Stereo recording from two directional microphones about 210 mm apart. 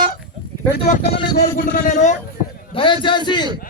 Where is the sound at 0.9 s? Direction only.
30° left (ahead or behind).